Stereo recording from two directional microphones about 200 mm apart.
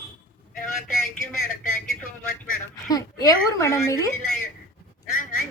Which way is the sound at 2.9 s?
15° left (ahead or behind).